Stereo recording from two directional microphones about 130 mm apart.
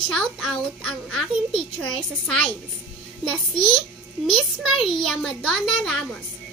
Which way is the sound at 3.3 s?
5° left (ahead or behind).